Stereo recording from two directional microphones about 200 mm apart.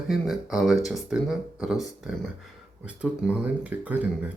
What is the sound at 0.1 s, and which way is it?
Speech, centre (ahead or behind).